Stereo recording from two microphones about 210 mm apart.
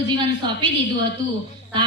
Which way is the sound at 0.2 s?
20° right (ahead or behind).